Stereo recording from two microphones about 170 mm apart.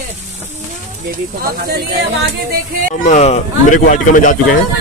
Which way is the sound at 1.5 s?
65° right (ahead or behind).